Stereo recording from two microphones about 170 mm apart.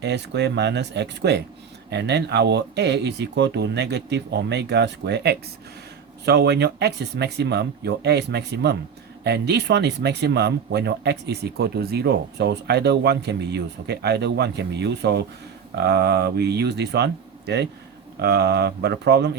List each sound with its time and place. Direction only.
0.0 s speech: 90° right